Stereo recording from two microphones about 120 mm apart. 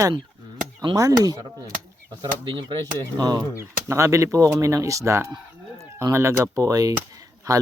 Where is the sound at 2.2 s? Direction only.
40° right (ahead or behind).